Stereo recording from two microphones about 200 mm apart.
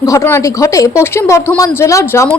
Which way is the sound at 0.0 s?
15° left (ahead or behind).